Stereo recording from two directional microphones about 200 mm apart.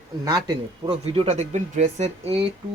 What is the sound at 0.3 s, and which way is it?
Speech, 20° right (ahead or behind).